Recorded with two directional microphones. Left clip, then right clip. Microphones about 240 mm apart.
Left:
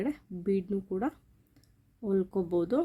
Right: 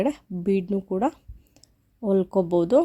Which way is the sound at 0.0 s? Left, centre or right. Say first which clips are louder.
Right 9 dB; right.